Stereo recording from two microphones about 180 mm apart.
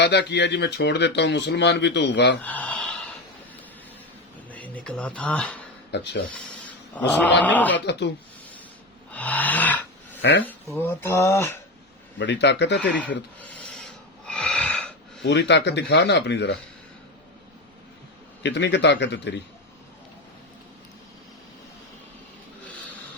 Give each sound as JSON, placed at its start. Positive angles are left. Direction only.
{"t": 0.0, "sound": "speech", "side_deg": 70}
{"t": 2.4, "sound": "speech", "side_deg": 10}
{"t": 4.5, "sound": "speech", "side_deg": 10}
{"t": 5.9, "sound": "speech", "side_deg": 70}
{"t": 6.3, "sound": "a sound", "side_deg": 10}
{"t": 7.1, "sound": "speech", "side_deg": 10}
{"t": 7.9, "sound": "speech", "side_deg": 70}
{"t": 9.1, "sound": "a sound", "side_deg": 10}
{"t": 10.2, "sound": "speech", "side_deg": 70}
{"t": 10.4, "sound": "speech", "side_deg": 10}
{"t": 12.2, "sound": "speech", "side_deg": 75}
{"t": 13.0, "sound": "snort", "side_deg": 10}
{"t": 15.2, "sound": "speech", "side_deg": 75}
{"t": 18.4, "sound": "speech", "side_deg": 75}